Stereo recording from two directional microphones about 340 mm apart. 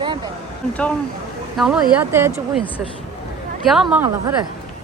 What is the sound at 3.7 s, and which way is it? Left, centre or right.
Speech, centre.